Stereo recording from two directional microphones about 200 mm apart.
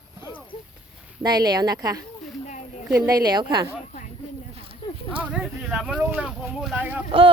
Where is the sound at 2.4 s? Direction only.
40° left (ahead or behind).